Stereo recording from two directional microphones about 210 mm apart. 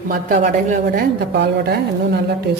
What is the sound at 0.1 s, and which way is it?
A woman's voice, 45° right (ahead or behind).